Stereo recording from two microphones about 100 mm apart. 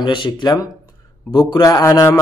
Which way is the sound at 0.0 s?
50° left (ahead or behind).